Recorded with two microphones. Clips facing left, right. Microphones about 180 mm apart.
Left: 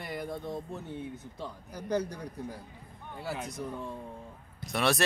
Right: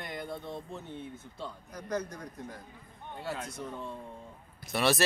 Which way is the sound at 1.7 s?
30° left (ahead or behind).